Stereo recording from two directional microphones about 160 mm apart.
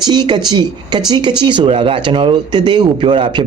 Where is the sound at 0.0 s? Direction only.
30° right (ahead or behind).